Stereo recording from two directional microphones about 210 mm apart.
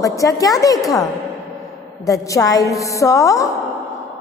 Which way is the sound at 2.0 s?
15° left (ahead or behind).